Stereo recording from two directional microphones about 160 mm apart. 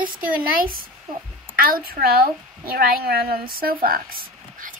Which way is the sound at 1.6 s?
70° right (ahead or behind).